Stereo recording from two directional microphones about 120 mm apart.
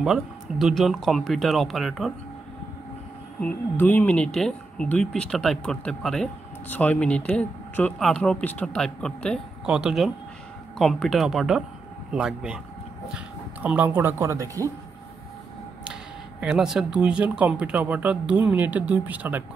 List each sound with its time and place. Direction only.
0.0 s speech: 5° right (ahead or behind)
3.3 s speech: 10° left (ahead or behind)
9.7 s speech: 5° right (ahead or behind); by 14.7 s 25° right (ahead or behind)
15.8 s speech: 5° right (ahead or behind)